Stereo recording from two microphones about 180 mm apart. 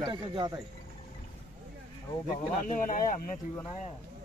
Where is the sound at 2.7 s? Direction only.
45° left (ahead or behind).